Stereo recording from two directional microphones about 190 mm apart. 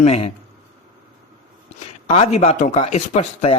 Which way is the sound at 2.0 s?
35° left (ahead or behind).